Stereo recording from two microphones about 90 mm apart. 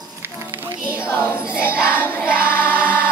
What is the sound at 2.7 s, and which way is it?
Choir, 15° right (ahead or behind).